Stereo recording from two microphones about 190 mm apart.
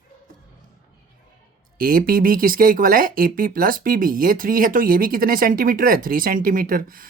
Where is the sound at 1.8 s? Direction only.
50° right (ahead or behind).